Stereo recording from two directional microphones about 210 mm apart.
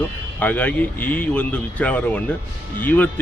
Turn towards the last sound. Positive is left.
turn(degrees=10)  # may be behind; listen again after turning